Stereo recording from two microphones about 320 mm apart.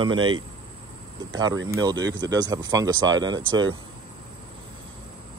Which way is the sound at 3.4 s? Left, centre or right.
Right.